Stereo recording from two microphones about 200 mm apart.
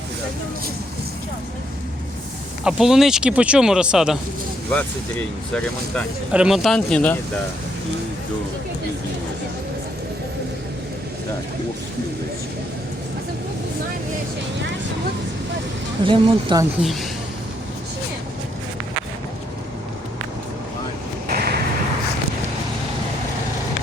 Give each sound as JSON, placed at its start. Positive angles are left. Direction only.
{"t": 2.6, "sound": "speech", "side_deg": 0}
{"t": 5.5, "sound": "speech", "side_deg": 5}
{"t": 16.0, "sound": "speech", "side_deg": -25}
{"t": 16.8, "sound": "speech", "side_deg": 0}
{"t": 21.2, "sound": "vehicle", "side_deg": -50}